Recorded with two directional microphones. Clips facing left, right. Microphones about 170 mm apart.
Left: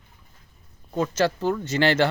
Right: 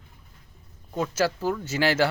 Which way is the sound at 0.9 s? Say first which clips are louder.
Left 2 dB; 5° right (ahead or behind).